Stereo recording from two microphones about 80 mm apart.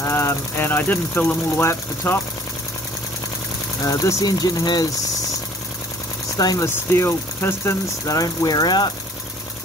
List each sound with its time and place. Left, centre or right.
0.0 s speech: left
3.8 s speech: left
6.3 s speech: left